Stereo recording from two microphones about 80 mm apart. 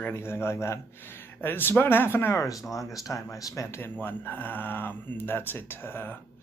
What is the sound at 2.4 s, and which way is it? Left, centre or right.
Speech, left.